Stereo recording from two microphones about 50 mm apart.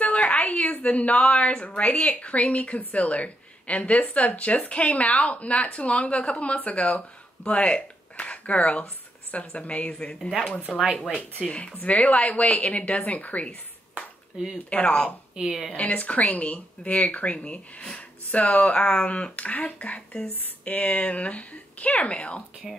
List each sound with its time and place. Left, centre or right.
0.0 s a woman's voice: left
10.7 s speech: centre
11.4 s a woman's voice: left
14.7 s a woman's voice: left
15.4 s a woman's voice: centre
15.7 s a woman's voice: left